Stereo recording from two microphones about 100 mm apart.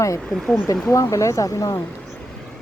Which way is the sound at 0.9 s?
30° left (ahead or behind).